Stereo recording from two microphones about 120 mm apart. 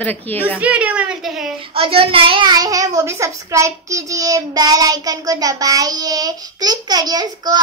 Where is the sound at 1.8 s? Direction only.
50° right (ahead or behind).